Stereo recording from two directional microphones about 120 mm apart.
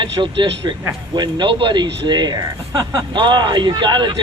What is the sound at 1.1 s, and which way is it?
Speech, 40° right (ahead or behind).